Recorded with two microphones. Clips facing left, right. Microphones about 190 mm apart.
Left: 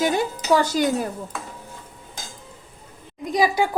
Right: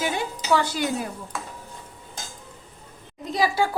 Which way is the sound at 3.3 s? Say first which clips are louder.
Left 3 dB; 15° left (ahead or behind).